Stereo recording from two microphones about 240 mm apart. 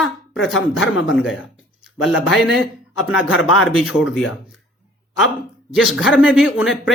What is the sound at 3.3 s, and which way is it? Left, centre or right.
Speech, left.